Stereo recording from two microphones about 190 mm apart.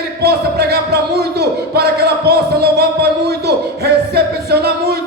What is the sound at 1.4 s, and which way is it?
Music, 55° right (ahead or behind).